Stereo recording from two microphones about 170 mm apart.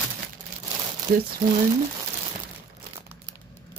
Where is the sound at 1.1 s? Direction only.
50° right (ahead or behind).